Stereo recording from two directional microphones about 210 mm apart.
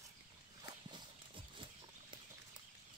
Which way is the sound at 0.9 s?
25° right (ahead or behind).